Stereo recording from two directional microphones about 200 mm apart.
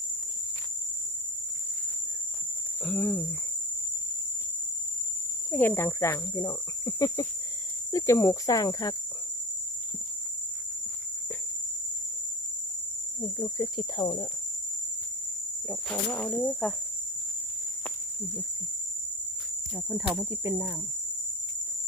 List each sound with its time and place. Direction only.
2.8 s speech: 5° left (ahead or behind)
5.5 s speech: 10° left (ahead or behind)
13.2 s speech: 15° left (ahead or behind)
15.6 s speech: centre (ahead or behind)
19.7 s speech: 5° right (ahead or behind)